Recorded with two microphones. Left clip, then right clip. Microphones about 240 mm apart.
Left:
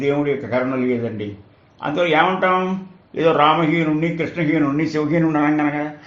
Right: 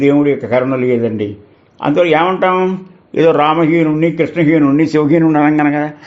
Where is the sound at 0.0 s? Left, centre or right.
Right.